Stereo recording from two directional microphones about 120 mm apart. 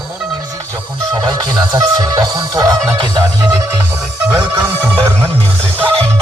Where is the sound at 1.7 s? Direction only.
35° right (ahead or behind).